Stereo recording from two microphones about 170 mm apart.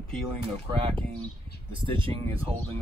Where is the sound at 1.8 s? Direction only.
30° right (ahead or behind).